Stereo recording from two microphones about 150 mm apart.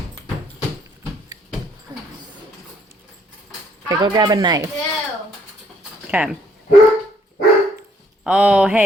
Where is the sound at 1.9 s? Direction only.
20° right (ahead or behind).